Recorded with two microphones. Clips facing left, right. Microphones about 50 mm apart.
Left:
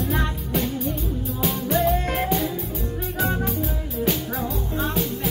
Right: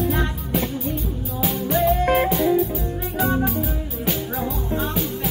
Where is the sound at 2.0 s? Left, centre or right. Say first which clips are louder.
Right 7 dB; right.